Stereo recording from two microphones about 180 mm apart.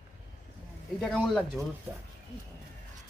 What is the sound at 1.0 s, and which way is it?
Speech, 5° left (ahead or behind).